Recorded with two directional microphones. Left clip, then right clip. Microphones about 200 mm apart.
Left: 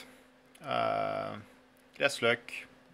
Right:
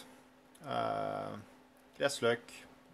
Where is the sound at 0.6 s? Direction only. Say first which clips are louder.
Left 5 dB; 10° right (ahead or behind).